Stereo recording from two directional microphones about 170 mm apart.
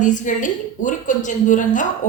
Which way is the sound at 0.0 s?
50° left (ahead or behind).